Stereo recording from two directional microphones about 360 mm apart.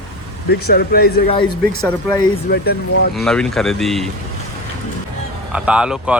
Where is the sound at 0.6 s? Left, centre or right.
Left.